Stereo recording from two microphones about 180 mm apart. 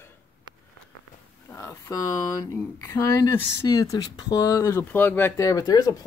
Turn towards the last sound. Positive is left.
turn(degrees=20)  # may be behind; listen again after turning